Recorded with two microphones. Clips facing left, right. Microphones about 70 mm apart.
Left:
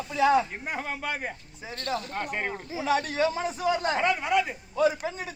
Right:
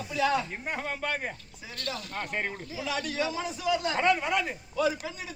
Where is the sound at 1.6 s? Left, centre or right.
Left.